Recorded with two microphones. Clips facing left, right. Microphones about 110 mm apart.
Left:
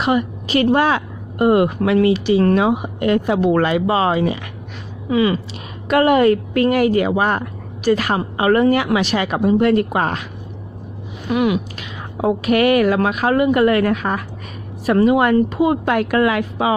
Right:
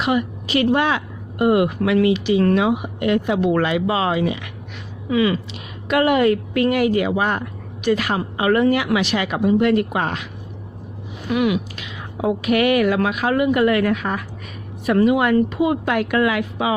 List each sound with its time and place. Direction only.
0.0 s speech: 40° left (ahead or behind)
11.3 s speech: 35° left (ahead or behind)